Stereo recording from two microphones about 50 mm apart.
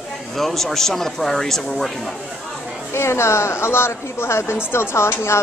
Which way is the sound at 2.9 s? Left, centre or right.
Left.